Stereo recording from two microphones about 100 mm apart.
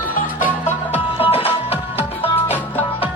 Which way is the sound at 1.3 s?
75° left (ahead or behind).